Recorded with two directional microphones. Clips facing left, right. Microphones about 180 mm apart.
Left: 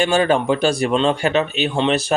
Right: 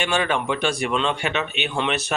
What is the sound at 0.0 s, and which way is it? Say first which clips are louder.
Speech: left 7 dB; 35° left (ahead or behind).